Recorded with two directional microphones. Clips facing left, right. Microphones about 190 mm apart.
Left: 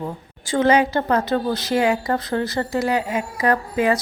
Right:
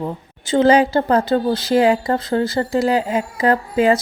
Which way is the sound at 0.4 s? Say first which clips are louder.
Right 4 dB; 25° right (ahead or behind).